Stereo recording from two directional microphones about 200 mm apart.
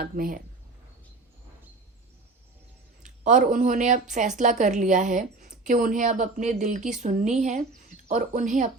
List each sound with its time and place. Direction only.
0.0 s speech: 45° right (ahead or behind)
3.0 s a woman's voice: 40° right (ahead or behind)